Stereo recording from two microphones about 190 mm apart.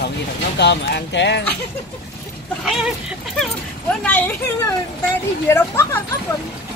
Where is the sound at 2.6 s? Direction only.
Centre (ahead or behind); by 6.0 s 15° left (ahead or behind).